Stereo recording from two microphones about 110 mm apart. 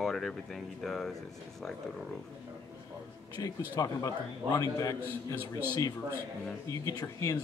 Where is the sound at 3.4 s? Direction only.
30° left (ahead or behind).